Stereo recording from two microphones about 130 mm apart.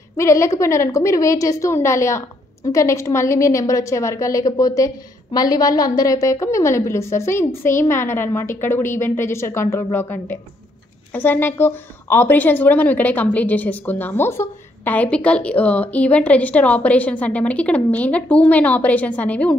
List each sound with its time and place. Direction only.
0.2 s a woman's voice: 20° left (ahead or behind)